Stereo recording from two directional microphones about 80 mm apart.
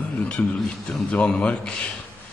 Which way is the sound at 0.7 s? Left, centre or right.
Centre.